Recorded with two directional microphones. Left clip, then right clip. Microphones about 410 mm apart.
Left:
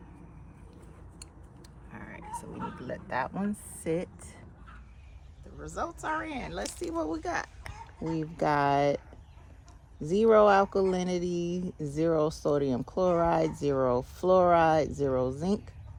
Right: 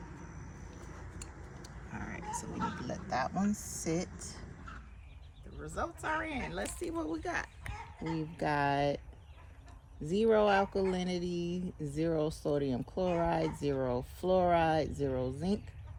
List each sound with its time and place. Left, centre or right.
1.9 s speech: centre
5.5 s speech: centre
10.0 s speech: centre